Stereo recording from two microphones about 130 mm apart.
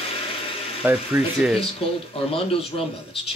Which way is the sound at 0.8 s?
10° right (ahead or behind).